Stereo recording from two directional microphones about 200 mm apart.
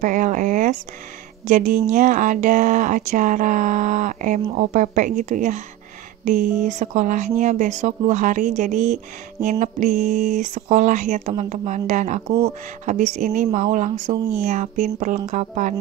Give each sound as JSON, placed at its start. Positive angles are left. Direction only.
{"t": 0.0, "sound": "speech", "side_deg": -40}
{"t": 14.1, "sound": "speech", "side_deg": -15}
{"t": 14.4, "sound": "speech", "side_deg": -35}